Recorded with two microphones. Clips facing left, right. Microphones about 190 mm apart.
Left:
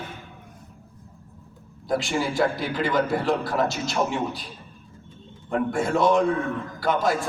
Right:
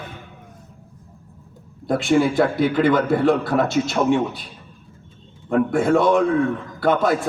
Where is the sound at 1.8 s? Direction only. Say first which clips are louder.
Right 7 dB; 60° right (ahead or behind).